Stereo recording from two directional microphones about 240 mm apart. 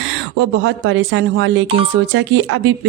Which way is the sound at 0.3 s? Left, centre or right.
Right.